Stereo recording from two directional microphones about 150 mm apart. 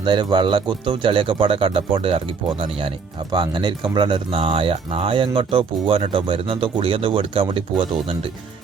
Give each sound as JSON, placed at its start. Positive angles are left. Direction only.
{"t": 0.0, "sound": "speech", "side_deg": -30}